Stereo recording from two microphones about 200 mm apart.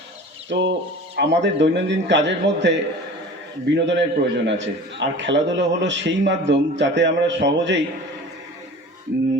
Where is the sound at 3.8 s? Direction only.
60° right (ahead or behind).